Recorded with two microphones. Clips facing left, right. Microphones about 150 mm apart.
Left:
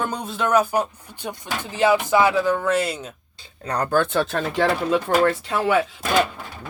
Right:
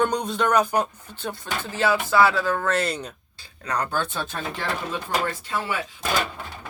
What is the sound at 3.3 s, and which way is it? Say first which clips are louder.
Speech: left 2 dB; 30° left (ahead or behind).